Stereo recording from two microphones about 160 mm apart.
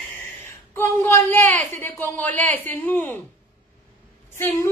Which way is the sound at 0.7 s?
15° left (ahead or behind).